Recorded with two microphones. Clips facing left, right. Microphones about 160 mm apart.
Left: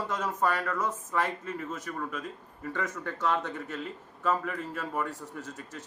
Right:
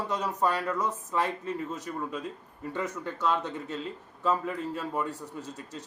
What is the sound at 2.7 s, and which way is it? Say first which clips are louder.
A man's voice: right 2 dB; 20° right (ahead or behind).